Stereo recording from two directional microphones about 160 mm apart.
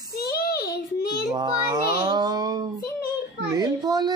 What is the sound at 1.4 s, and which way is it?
Speech, 25° right (ahead or behind).